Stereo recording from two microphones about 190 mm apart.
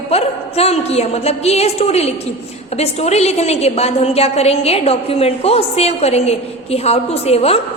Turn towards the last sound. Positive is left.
turn(degrees=30)  # may be behind; listen again after turning